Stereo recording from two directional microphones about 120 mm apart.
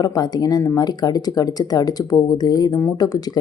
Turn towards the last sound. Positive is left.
turn(degrees=30)  # may be behind; listen again after turning